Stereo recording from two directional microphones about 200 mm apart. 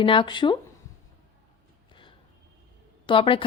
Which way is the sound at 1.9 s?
25° left (ahead or behind).